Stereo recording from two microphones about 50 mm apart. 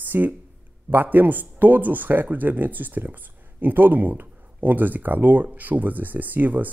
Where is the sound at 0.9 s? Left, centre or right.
Right.